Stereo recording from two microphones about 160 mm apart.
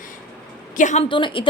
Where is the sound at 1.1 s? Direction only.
30° left (ahead or behind).